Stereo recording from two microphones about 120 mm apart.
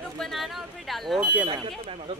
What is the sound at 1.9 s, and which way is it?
Speech, 55° right (ahead or behind).